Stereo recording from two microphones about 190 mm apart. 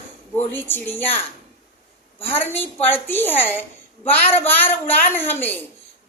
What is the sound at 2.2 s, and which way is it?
A woman's voice, 10° left (ahead or behind).